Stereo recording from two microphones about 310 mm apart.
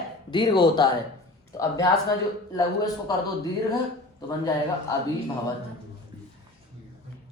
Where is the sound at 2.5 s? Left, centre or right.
Centre.